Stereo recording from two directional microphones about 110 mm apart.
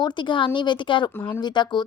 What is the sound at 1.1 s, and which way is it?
Speech, 20° left (ahead or behind).